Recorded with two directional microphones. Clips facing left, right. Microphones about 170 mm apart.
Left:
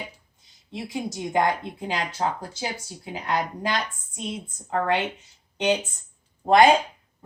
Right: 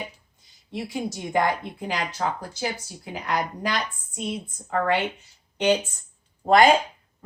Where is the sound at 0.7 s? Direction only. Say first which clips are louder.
Right 1 dB; 20° left (ahead or behind).